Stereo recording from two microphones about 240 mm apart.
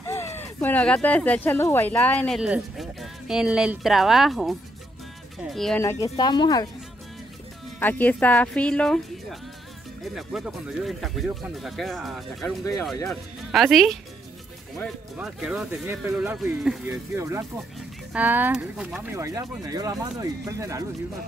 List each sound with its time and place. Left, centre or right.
0.0 s speech: centre
5.8 s speech: centre
7.8 s speech: centre
15.1 s speech: centre